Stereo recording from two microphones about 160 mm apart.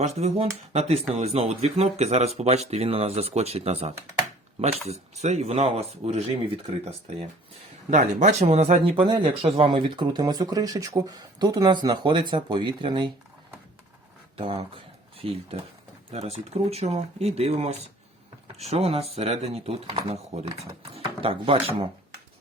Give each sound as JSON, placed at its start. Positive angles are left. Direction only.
{"t": 0.0, "sound": "speech", "side_deg": -40}
{"t": 7.9, "sound": "speech", "side_deg": -50}
{"t": 14.3, "sound": "speech", "side_deg": -35}